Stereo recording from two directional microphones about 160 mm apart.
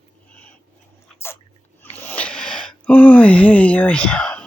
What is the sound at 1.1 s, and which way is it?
Sneeze, 15° left (ahead or behind).